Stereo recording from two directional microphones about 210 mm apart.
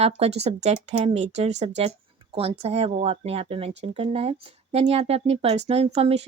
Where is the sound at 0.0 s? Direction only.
30° right (ahead or behind).